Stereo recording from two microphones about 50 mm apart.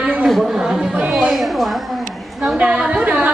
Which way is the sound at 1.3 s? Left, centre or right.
Centre.